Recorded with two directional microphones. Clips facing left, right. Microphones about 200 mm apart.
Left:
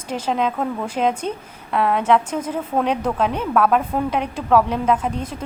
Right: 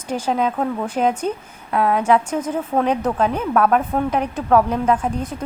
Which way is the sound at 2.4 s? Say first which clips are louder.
Right 2 dB; 10° left (ahead or behind).